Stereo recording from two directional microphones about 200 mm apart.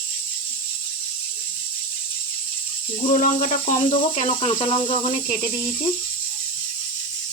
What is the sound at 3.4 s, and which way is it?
Speech, 35° left (ahead or behind).